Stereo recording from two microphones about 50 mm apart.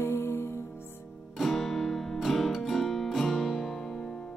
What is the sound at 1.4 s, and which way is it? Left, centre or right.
Guitar, centre.